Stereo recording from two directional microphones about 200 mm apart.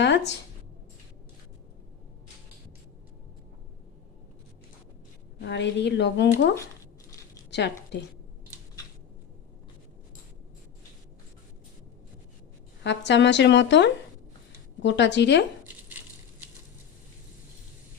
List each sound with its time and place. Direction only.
0.0 s a sound: 60° left (ahead or behind)
5.4 s speech: 60° left (ahead or behind)
7.5 s a woman's voice: 60° left (ahead or behind)
12.8 s speech: 60° left (ahead or behind)